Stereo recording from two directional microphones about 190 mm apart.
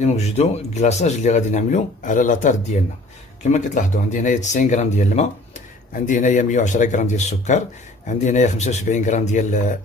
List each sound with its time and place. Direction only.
0.0 s speech: 35° left (ahead or behind)